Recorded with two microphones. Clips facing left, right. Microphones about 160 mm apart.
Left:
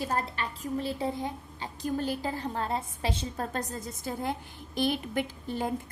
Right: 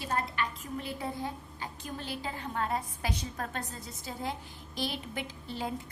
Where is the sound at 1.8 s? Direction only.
45° left (ahead or behind).